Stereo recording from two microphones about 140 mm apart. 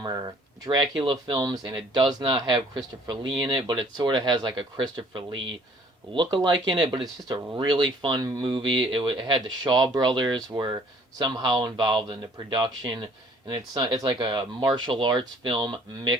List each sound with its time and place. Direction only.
0.0 s speech: 30° right (ahead or behind)